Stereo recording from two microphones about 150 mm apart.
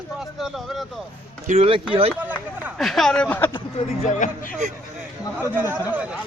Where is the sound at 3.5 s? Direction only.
40° left (ahead or behind); by 4.5 s 60° left (ahead or behind).